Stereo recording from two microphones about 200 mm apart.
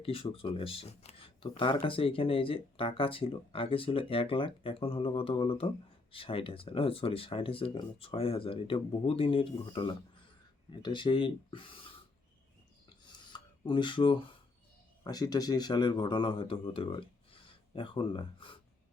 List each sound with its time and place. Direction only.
0.0 s speech: 30° left (ahead or behind)
13.1 s a sound: 20° left (ahead or behind)
15.0 s speech: 20° left (ahead or behind)